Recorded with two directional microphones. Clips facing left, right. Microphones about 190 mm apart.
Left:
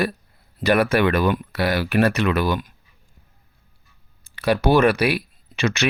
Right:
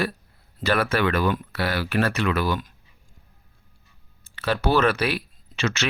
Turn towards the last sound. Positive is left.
turn(degrees=15)  # may be behind; listen again after turning